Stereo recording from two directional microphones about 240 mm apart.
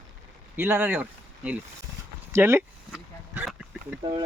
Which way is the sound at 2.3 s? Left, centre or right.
Centre.